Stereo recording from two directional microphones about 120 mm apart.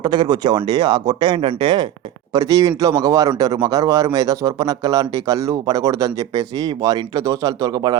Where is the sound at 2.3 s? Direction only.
30° right (ahead or behind).